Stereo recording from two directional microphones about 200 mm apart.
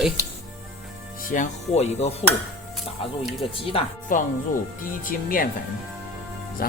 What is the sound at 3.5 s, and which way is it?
Speech, 30° left (ahead or behind).